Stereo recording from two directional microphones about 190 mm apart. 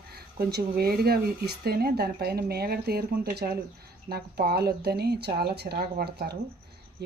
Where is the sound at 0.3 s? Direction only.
55° right (ahead or behind).